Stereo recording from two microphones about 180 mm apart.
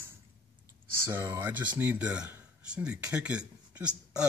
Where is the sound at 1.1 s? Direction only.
15° right (ahead or behind).